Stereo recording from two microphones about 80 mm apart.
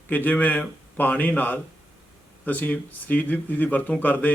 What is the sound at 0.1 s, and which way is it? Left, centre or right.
A man's voice, left.